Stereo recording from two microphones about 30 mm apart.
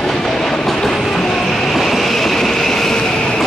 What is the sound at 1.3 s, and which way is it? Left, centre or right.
Vehicle, centre.